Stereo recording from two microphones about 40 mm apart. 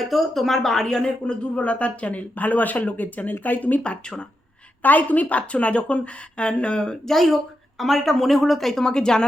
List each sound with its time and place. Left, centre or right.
0.0 s speech: centre
1.5 s speech: left
4.8 s a woman's voice: left
7.1 s speech: centre
8.8 s speech: centre